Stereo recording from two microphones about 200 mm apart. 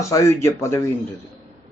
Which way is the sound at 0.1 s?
15° left (ahead or behind).